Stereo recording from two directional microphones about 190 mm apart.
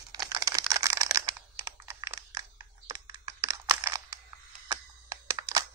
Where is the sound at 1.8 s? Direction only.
15° right (ahead or behind).